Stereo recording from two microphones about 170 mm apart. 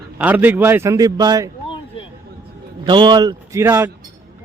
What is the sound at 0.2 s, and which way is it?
A man's voice, 10° right (ahead or behind).